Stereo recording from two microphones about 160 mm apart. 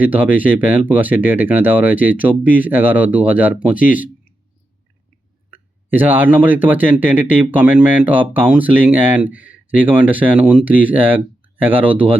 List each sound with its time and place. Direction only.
0.0 s speech: 10° right (ahead or behind)
5.5 s speech: 10° right (ahead or behind)